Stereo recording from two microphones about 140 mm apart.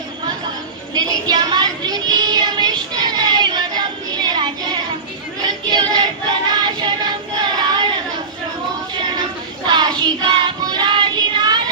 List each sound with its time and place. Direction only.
0.9 s child singing: 30° right (ahead or behind)
5.4 s choir: 30° right (ahead or behind)
7.4 s child singing: 30° right (ahead or behind)
9.6 s child singing: 30° right (ahead or behind)